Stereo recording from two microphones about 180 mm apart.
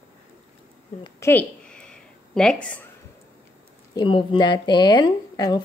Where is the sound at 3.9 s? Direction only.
25° left (ahead or behind).